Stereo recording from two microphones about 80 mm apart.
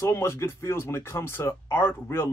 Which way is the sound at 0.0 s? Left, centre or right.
Left.